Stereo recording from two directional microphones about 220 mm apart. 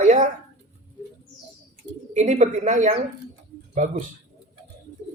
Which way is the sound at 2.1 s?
30° right (ahead or behind).